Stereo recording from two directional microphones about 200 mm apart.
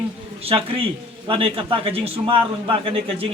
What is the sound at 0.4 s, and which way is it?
A man's voice, 30° right (ahead or behind).